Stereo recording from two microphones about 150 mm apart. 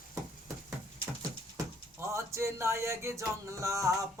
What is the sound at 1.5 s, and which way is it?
Speech, 20° right (ahead or behind).